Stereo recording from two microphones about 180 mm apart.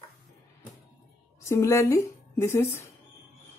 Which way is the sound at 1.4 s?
15° left (ahead or behind).